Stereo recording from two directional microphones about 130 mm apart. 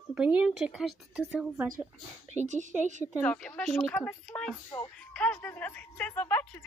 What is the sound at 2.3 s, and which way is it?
Speech, 65° right (ahead or behind).